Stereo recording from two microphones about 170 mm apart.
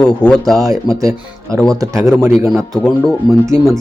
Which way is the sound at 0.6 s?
20° right (ahead or behind).